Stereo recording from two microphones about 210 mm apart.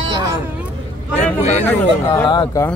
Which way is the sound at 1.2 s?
35° left (ahead or behind).